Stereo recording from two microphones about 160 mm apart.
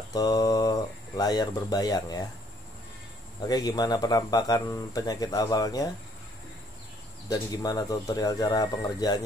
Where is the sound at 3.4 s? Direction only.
25° left (ahead or behind).